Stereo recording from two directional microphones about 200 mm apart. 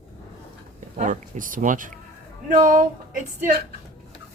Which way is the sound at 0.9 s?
40° right (ahead or behind).